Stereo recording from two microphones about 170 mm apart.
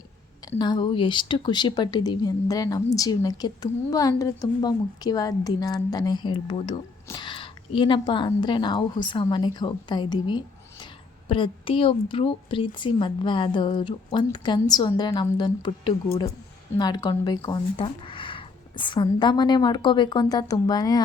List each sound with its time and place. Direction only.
0.6 s speech: 25° left (ahead or behind)